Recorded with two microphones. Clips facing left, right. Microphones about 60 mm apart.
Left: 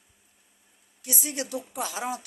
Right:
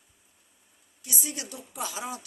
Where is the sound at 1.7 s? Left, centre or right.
Left.